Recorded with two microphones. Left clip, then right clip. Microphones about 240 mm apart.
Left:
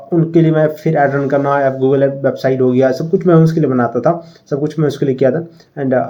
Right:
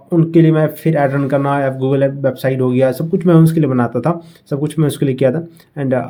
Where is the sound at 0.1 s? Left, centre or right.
Right.